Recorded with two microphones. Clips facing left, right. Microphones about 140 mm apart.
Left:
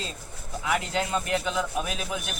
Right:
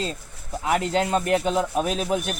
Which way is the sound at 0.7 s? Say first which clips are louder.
Right 5 dB; 40° right (ahead or behind).